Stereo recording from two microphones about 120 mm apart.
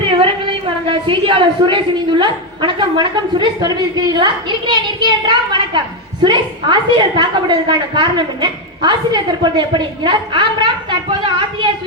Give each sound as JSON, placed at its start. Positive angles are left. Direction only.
{"t": 0.9, "sound": "a woman's voice", "side_deg": -45}